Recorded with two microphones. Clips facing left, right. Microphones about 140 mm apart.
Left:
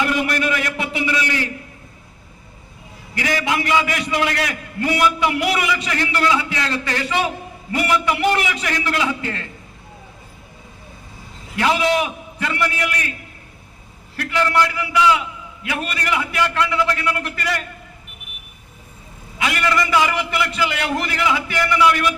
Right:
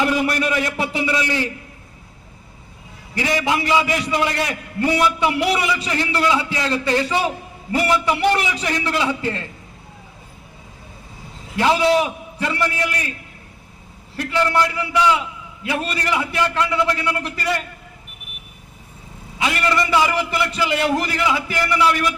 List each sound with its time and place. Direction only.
0.4 s a sound: 30° right (ahead or behind)
3.2 s a man's voice: 30° right (ahead or behind)
11.5 s a man's voice: 30° right (ahead or behind)
14.2 s a man's voice: 25° right (ahead or behind)
19.4 s a man's voice: 25° right (ahead or behind)